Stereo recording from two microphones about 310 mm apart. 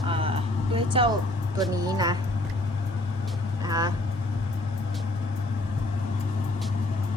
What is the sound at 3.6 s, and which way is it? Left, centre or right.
Speech, centre.